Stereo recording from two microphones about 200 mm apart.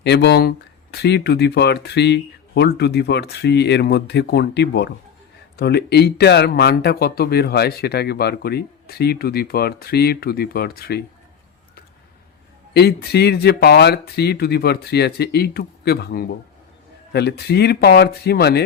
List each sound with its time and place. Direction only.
0.0 s speech: 60° left (ahead or behind)
12.7 s speech: 55° left (ahead or behind)